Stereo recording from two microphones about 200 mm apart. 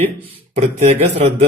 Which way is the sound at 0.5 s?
30° right (ahead or behind).